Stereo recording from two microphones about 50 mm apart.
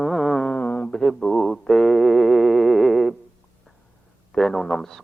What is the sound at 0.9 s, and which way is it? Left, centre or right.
Speech, centre.